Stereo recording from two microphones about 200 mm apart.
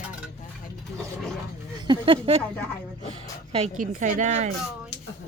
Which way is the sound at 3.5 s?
35° right (ahead or behind).